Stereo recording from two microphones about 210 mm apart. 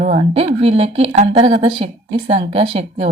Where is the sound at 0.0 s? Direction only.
35° right (ahead or behind).